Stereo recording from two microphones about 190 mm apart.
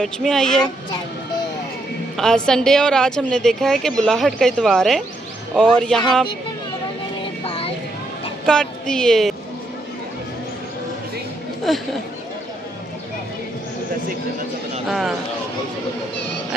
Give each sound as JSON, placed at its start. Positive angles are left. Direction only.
{"t": 0.0, "sound": "a woman's voice", "side_deg": 5}
{"t": 2.1, "sound": "a woman's voice", "side_deg": 5}
{"t": 7.4, "sound": "vehicle", "side_deg": 30}
{"t": 8.4, "sound": "a woman's voice", "side_deg": 5}
{"t": 11.7, "sound": "a woman's voice", "side_deg": 0}
{"t": 14.8, "sound": "a woman's voice", "side_deg": 0}